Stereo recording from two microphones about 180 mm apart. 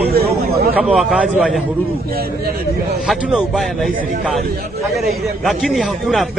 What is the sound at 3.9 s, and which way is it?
Speech, 50° right (ahead or behind).